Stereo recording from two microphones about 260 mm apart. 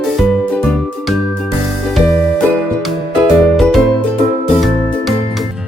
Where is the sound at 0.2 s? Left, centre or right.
Centre.